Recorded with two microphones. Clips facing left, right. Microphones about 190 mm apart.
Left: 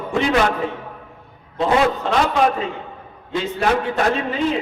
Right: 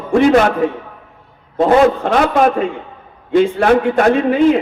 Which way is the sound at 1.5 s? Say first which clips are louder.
Right 7 dB; 50° right (ahead or behind).